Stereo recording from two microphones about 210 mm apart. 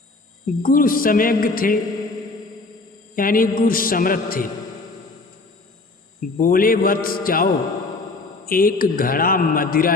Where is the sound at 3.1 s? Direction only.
40° left (ahead or behind).